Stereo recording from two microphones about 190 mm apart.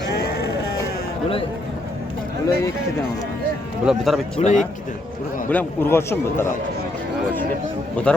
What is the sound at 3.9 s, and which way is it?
Speech, centre (ahead or behind).